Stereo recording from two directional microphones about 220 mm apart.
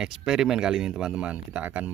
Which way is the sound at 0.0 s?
Centre (ahead or behind).